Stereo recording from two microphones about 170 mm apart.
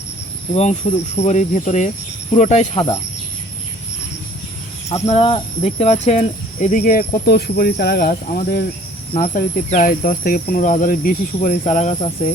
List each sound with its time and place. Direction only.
0.5 s speech: 40° left (ahead or behind)
5.0 s speech: 35° left (ahead or behind); by 9.5 s 60° left (ahead or behind)
9.6 s speech: 45° left (ahead or behind)